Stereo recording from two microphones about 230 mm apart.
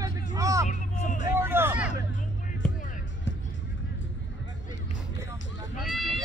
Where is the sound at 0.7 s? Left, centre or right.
Left.